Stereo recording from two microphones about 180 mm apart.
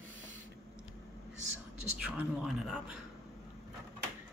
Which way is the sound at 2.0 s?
5° right (ahead or behind).